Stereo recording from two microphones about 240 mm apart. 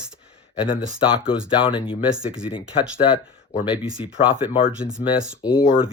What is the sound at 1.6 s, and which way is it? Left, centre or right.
Speech, left.